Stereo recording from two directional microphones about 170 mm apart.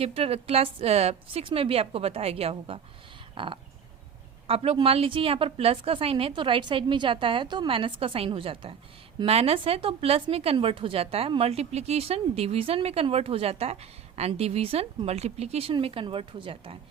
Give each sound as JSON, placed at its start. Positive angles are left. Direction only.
{"t": 0.0, "sound": "speech", "side_deg": -35}